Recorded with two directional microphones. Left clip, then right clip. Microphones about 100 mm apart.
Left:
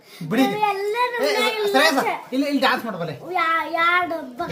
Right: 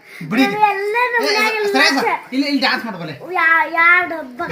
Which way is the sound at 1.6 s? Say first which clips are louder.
Right 3 dB; 45° left (ahead or behind).